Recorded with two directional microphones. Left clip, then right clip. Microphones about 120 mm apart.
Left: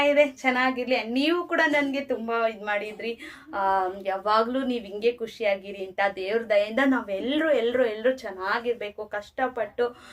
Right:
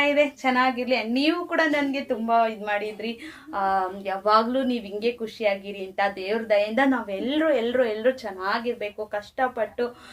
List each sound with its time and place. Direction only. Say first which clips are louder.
0.0 s a woman's voice: even; 25° left (ahead or behind)